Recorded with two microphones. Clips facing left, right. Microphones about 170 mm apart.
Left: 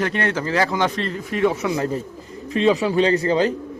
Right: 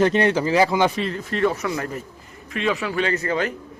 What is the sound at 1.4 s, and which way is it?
Speech, 15° left (ahead or behind).